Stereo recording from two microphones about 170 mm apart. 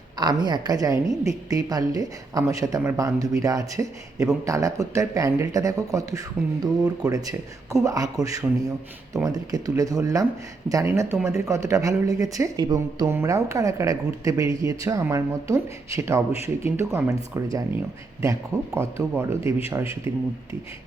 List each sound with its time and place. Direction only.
0.2 s a woman's voice: 25° right (ahead or behind)